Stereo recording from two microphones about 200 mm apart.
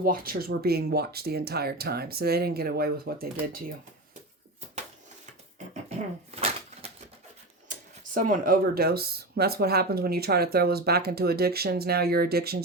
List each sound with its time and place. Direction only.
0.0 s speech: 45° right (ahead or behind)
6.3 s a sound: 30° right (ahead or behind)
7.7 s speech: 45° right (ahead or behind)